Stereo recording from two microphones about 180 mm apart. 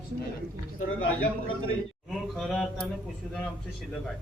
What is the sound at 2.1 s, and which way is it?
Mantra, centre (ahead or behind).